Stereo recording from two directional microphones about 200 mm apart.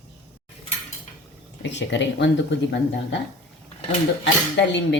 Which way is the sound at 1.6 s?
60° left (ahead or behind).